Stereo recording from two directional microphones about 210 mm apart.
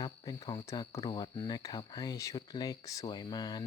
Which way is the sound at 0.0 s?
20° left (ahead or behind).